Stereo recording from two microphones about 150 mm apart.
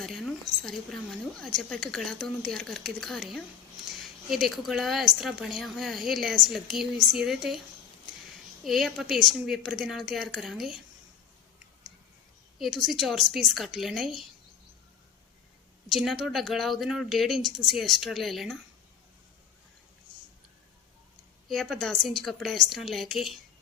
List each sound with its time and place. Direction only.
0.0 s a woman's voice: centre (ahead or behind)
8.6 s a woman's voice: centre (ahead or behind)
12.5 s a woman's voice: centre (ahead or behind)
15.9 s a woman's voice: centre (ahead or behind)
21.5 s a woman's voice: centre (ahead or behind)